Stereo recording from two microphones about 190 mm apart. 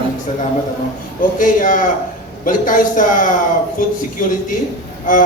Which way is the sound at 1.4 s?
45° left (ahead or behind).